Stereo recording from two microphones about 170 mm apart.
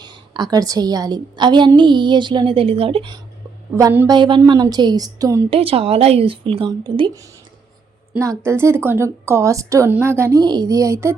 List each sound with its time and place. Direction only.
0.0 s a sound: 25° right (ahead or behind)
0.5 s a woman's voice: 20° right (ahead or behind)
3.8 s a woman's voice: 20° right (ahead or behind)
5.5 s a woman's voice: 35° right (ahead or behind); by 11.1 s 20° right (ahead or behind)